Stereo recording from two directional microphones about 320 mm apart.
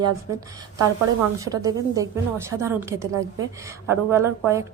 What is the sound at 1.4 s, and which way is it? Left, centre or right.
A woman's voice, centre.